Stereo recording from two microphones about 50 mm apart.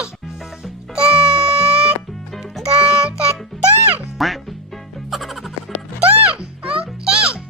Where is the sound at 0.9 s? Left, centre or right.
Centre.